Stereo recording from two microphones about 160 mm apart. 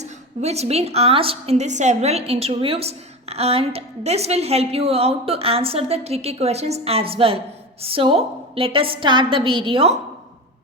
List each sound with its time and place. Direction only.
0.0 s a woman's voice: 40° right (ahead or behind)